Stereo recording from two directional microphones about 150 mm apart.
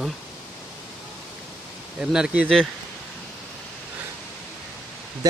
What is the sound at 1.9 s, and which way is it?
Speech, 5° right (ahead or behind).